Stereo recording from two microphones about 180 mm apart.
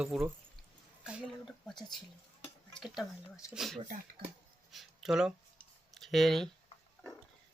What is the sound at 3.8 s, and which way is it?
Speech, 35° right (ahead or behind).